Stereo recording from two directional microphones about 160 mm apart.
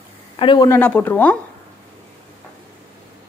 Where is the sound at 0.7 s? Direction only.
10° left (ahead or behind).